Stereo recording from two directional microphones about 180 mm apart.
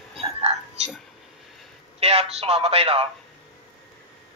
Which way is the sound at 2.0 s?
35° right (ahead or behind).